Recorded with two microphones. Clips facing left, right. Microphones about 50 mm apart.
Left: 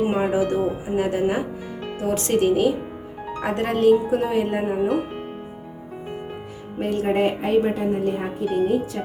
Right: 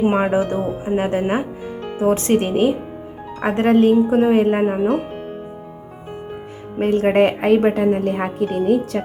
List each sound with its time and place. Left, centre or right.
0.0 s speech: right
6.7 s speech: right